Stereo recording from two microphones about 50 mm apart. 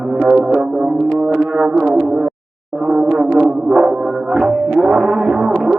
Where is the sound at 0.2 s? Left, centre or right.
Centre.